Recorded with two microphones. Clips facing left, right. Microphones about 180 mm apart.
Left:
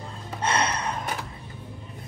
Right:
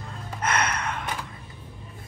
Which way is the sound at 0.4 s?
30° left (ahead or behind).